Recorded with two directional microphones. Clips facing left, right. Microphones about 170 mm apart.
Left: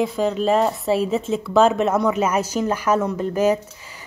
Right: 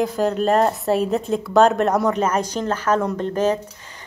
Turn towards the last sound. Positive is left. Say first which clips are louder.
# left 1 dB
turn(degrees=10)  # may be behind; listen again after turning